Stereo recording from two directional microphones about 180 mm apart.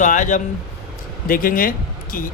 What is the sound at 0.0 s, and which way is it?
A man's voice, 45° left (ahead or behind).